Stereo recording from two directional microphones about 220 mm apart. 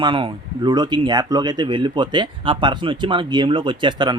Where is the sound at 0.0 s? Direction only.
20° right (ahead or behind).